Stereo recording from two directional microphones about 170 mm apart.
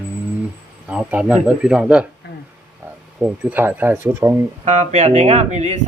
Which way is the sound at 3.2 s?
10° right (ahead or behind).